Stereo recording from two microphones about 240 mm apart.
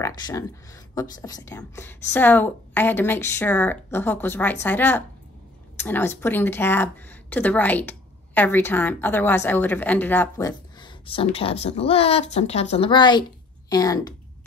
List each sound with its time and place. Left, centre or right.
0.0 s a woman's voice: centre